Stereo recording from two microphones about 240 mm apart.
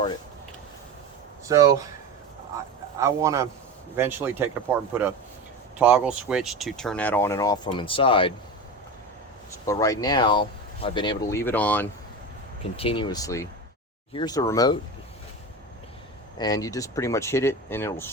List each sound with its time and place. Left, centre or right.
1.5 s speech: centre
3.0 s speech: centre; by 8.3 s left
9.6 s speech: centre
12.7 s speech: left
16.4 s speech: centre